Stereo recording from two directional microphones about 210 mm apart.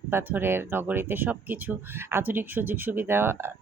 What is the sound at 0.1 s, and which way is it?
Speech, 10° right (ahead or behind).